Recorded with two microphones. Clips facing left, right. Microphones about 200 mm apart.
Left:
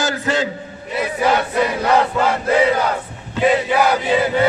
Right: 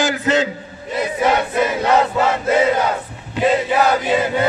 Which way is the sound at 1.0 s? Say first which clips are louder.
Even; 20° right (ahead or behind).